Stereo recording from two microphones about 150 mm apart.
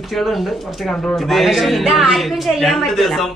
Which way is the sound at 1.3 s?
Centre (ahead or behind).